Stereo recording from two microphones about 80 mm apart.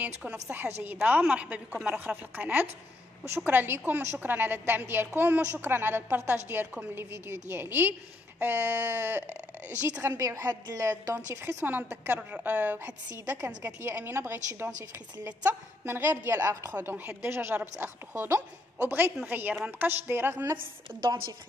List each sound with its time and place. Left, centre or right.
0.0 s a woman's voice: right
10.0 s a woman's voice: right
11.6 s a woman's voice: right
13.1 s a woman's voice: right
16.7 s a woman's voice: right